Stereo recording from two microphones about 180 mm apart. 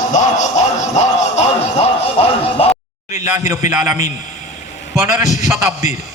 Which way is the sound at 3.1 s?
15° right (ahead or behind).